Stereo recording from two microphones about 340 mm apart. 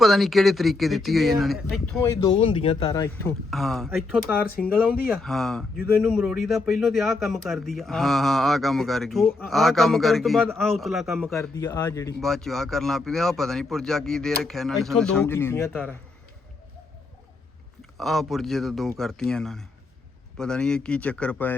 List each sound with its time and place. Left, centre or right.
0.0 s speech: centre
2.2 s speech: centre
3.5 s speech: centre
17.9 s speech: centre